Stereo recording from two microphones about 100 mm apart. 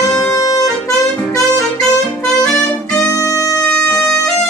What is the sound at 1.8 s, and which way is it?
Music, 5° left (ahead or behind).